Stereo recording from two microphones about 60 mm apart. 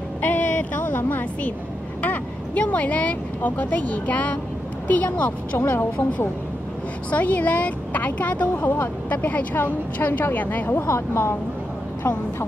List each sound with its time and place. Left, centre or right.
0.2 s vehicle: left
2.0 s a woman's voice: left
7.1 s a woman's voice: left